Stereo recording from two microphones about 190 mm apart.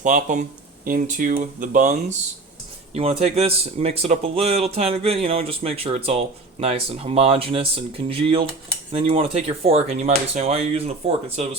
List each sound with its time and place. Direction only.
0.0 s speech: 40° right (ahead or behind)